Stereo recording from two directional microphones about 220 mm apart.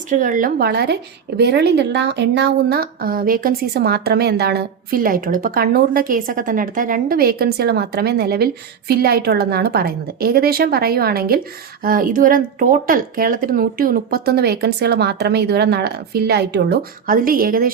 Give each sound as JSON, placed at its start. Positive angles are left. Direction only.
{"t": 0.1, "sound": "a woman's voice", "side_deg": -35}